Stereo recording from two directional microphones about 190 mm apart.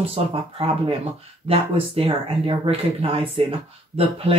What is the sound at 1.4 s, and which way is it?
Speech, 30° right (ahead or behind).